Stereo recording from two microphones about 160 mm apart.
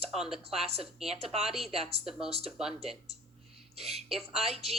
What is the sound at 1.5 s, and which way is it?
Speech, centre (ahead or behind).